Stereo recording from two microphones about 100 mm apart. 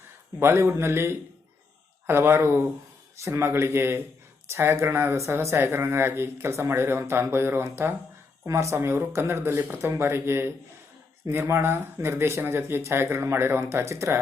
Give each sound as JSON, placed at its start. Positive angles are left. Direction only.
{"t": 0.3, "sound": "speech", "side_deg": -25}